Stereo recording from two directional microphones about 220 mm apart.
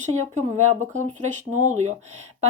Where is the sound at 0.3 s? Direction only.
30° right (ahead or behind).